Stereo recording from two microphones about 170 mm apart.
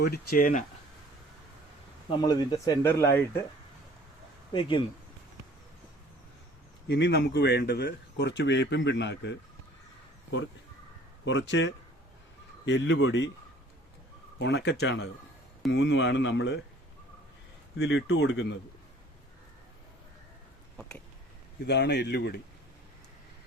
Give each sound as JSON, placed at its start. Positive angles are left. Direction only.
{"t": 0.0, "sound": "speech", "side_deg": 65}
{"t": 2.0, "sound": "speech", "side_deg": 25}
{"t": 6.8, "sound": "speech", "side_deg": 90}
{"t": 11.3, "sound": "speech", "side_deg": 90}
{"t": 14.3, "sound": "speech", "side_deg": 85}
{"t": 17.7, "sound": "speech", "side_deg": 90}
{"t": 21.7, "sound": "speech", "side_deg": 90}